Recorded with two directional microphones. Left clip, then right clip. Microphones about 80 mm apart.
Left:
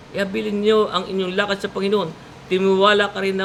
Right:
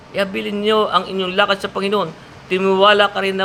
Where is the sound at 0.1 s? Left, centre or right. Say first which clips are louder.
Right 3 dB; left.